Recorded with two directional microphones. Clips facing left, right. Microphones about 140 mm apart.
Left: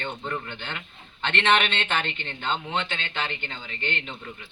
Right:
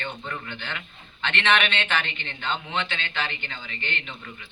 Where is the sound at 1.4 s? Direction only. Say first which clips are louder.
Left 1 dB; 20° left (ahead or behind).